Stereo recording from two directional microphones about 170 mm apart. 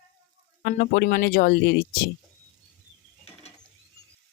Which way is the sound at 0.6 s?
65° left (ahead or behind).